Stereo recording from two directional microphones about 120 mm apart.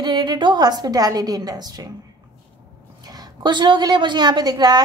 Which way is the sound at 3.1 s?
35° right (ahead or behind).